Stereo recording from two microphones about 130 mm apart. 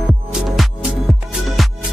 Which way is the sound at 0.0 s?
Centre (ahead or behind).